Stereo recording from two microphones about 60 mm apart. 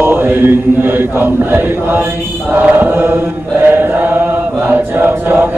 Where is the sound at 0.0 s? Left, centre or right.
Right.